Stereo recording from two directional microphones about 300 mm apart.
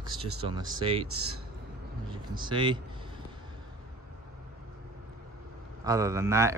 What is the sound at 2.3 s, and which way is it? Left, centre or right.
Speech, centre.